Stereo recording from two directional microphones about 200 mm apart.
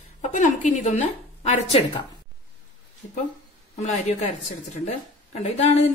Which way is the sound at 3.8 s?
35° left (ahead or behind).